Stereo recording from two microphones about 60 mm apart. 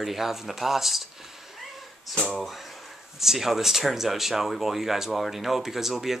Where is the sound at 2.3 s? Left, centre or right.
Centre.